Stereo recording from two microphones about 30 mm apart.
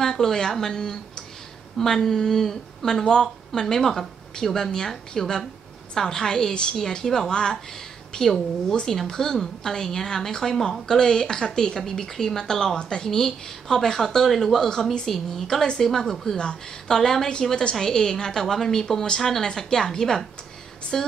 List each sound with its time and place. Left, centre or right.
0.0 s a woman's voice: centre